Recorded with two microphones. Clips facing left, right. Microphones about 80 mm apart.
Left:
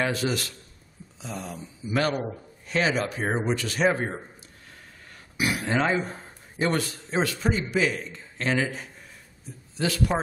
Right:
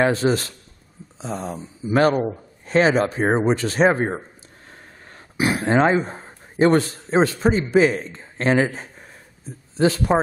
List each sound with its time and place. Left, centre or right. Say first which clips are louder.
0.0 s a man's voice: right 8 dB; right
5.4 s a man's voice: right 7 dB; right